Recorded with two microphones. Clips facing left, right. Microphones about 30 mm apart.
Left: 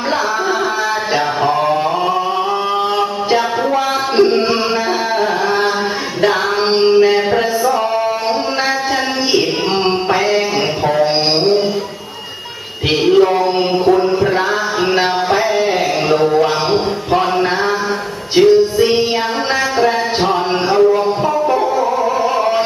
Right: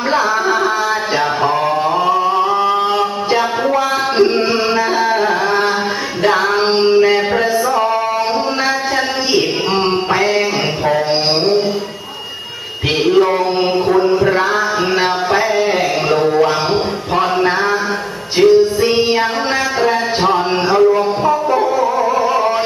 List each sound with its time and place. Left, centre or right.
3.0 s music: centre
6.2 s music: centre
9.8 s music: centre
10.9 s mantra: centre
13.0 s a sound: centre
18.4 s music: centre
18.8 s music: centre